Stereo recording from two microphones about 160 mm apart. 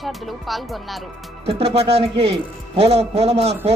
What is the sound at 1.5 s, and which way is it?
A man's voice, 40° right (ahead or behind).